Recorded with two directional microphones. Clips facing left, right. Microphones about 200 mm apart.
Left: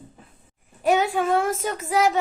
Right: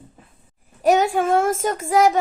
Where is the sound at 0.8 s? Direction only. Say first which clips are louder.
Right 3 dB; 45° right (ahead or behind).